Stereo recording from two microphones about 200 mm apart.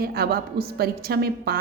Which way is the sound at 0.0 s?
50° right (ahead or behind).